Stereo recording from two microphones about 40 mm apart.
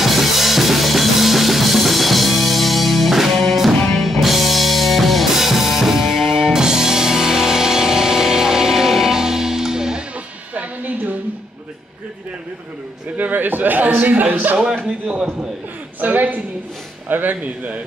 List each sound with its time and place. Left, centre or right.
0.0 s drum kit: centre
3.8 s music: centre
10.5 s music: right
13.2 s a man's voice: right
16.0 s a man's voice: right